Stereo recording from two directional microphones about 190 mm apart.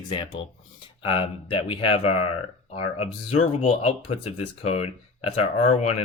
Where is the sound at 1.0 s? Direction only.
30° left (ahead or behind).